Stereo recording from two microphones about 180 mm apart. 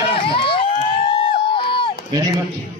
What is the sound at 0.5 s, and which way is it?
Crowd, 30° left (ahead or behind).